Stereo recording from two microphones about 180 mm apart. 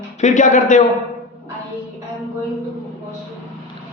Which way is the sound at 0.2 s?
40° left (ahead or behind).